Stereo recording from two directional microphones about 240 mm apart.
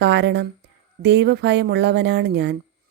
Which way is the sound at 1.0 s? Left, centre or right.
Right.